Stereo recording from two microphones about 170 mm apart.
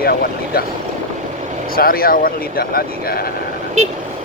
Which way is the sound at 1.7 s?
60° left (ahead or behind).